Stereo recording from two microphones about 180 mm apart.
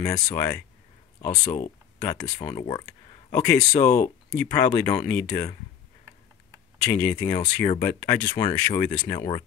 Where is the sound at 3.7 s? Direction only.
15° left (ahead or behind).